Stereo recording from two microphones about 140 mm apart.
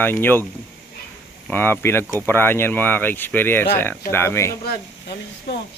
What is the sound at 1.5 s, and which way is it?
Speech, 15° left (ahead or behind).